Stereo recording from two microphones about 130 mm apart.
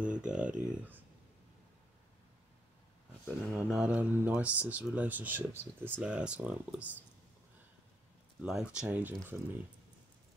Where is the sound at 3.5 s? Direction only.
5° right (ahead or behind).